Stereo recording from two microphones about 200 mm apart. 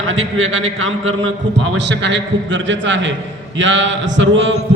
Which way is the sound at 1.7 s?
60° right (ahead or behind).